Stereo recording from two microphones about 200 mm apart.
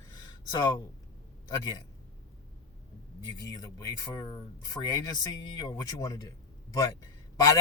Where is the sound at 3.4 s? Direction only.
20° left (ahead or behind).